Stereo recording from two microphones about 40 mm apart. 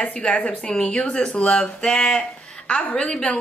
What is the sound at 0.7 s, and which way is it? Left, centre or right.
A woman's voice, left.